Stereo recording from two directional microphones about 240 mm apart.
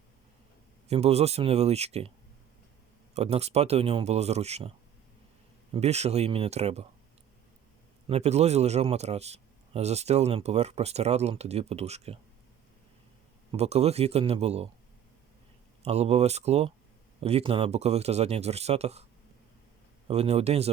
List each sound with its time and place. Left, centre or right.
0.9 s a man's voice: right
3.2 s a man's voice: right
5.7 s a man's voice: right
8.0 s a man's voice: right
13.5 s a man's voice: right
15.8 s a man's voice: right
20.1 s a man's voice: right